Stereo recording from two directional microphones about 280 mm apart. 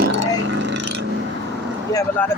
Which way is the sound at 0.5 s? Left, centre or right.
Right.